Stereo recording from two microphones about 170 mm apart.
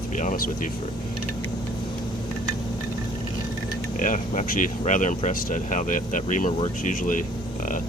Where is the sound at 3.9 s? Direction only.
50° left (ahead or behind).